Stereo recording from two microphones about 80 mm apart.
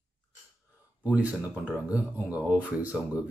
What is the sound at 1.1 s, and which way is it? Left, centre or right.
Speech, centre.